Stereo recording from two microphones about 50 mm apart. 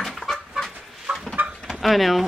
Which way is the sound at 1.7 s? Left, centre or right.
Centre.